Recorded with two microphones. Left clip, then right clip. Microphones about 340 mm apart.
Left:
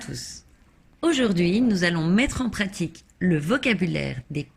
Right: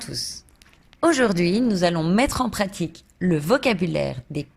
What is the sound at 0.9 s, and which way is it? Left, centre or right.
A woman's voice, centre.